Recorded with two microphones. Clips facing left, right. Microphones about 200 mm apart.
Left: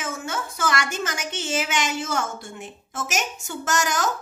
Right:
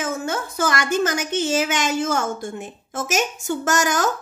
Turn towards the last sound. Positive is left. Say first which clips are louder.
# right 4 dB
turn(degrees=-55)  # may be behind; listen again after turning